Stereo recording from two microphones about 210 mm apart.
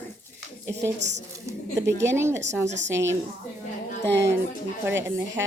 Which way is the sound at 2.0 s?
10° right (ahead or behind).